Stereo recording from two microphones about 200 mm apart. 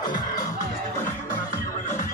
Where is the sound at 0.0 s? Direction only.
20° left (ahead or behind).